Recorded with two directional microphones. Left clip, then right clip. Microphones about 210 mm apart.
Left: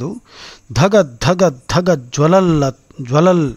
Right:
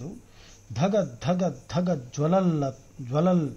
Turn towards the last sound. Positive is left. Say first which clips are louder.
# left 13 dB
turn(degrees=40)  # may be behind; listen again after turning